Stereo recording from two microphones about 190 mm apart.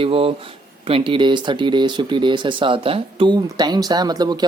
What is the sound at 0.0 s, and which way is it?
A man's voice, 30° right (ahead or behind).